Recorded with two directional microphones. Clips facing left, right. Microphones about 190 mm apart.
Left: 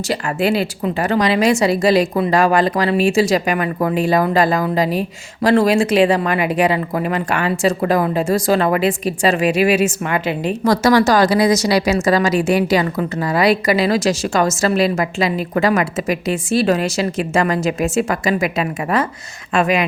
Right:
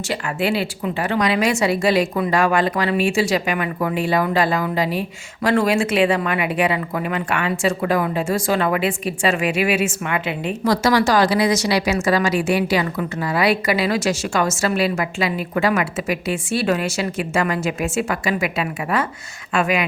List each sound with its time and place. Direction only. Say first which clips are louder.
0.1 s a woman's voice: left 4 dB; 40° left (ahead or behind)